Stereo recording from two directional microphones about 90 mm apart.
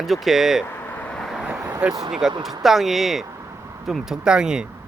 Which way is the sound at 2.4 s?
Centre (ahead or behind).